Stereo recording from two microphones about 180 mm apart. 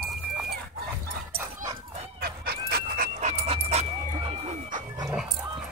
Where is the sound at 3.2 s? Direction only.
35° right (ahead or behind).